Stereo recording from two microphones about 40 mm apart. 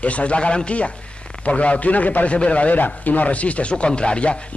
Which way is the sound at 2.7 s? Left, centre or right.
Left.